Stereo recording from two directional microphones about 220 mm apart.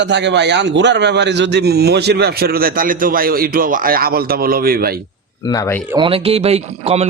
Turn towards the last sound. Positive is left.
turn(degrees=-30)  # may be behind; listen again after turning